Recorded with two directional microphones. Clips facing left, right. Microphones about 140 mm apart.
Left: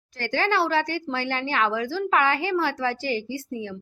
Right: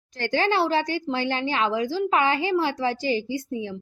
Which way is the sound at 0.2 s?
20° right (ahead or behind).